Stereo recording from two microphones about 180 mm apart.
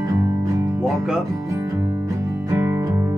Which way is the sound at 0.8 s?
5° right (ahead or behind).